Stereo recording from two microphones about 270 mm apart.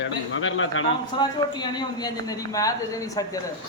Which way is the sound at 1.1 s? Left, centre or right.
Centre.